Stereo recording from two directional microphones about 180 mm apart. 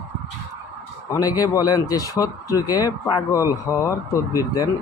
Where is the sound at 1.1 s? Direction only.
20° left (ahead or behind).